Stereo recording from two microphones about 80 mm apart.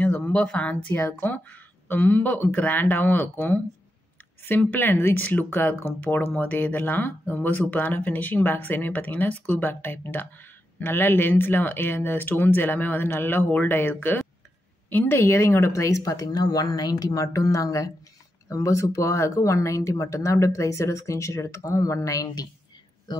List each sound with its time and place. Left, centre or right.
0.2 s speech: centre; by 22.5 s left
23.1 s speech: left